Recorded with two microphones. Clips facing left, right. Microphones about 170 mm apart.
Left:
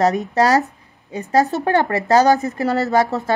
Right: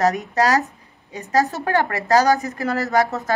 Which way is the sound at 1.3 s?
30° left (ahead or behind).